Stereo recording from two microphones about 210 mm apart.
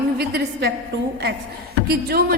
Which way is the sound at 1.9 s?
50° right (ahead or behind).